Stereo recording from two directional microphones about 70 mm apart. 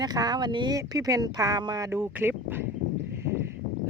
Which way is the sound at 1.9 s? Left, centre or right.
Right.